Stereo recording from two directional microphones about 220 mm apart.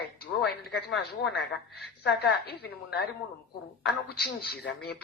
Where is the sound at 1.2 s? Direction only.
45° left (ahead or behind).